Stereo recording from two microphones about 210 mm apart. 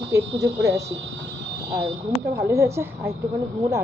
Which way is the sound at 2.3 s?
15° right (ahead or behind).